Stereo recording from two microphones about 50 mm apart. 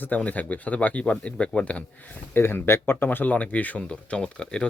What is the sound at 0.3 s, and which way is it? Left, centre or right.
Speech, left.